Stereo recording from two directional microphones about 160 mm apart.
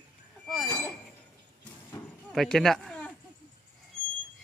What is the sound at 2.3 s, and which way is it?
Speech, centre (ahead or behind).